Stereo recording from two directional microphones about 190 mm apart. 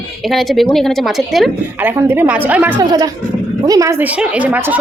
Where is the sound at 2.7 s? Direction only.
20° right (ahead or behind).